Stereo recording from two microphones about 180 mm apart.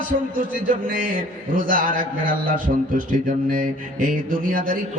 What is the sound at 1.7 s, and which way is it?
A man's voice, 50° right (ahead or behind).